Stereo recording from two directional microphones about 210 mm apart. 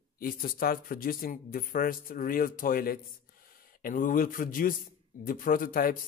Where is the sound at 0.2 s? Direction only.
45° left (ahead or behind).